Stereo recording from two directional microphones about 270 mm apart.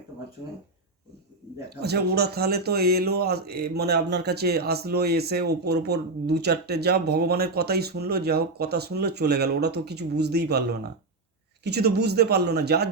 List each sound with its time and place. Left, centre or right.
1.8 s speech: right